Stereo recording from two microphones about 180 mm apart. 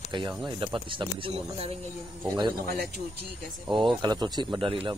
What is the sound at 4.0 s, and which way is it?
Speech, 25° right (ahead or behind).